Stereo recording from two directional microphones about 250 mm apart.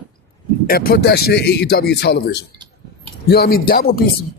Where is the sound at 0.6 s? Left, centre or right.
Left.